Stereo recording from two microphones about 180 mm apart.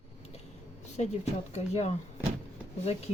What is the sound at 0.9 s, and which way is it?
Speech, 40° left (ahead or behind).